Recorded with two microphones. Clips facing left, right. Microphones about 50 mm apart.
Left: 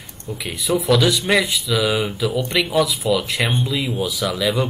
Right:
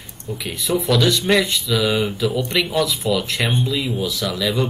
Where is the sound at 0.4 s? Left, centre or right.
Centre.